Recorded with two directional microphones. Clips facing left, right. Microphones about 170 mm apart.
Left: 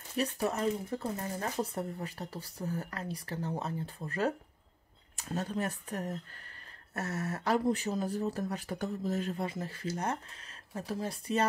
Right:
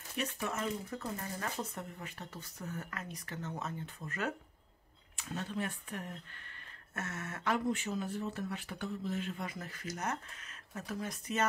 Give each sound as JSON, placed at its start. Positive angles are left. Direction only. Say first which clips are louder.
{"t": 0.2, "sound": "speech", "louder": "left 6 dB", "side_deg": 35}